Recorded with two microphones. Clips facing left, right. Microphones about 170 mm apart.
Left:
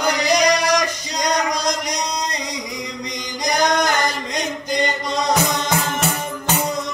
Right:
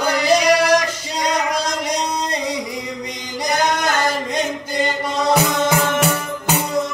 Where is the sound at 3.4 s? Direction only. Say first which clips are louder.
Left 1 dB; 15° left (ahead or behind).